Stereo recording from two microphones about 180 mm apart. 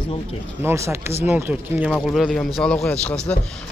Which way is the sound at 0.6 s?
15° right (ahead or behind).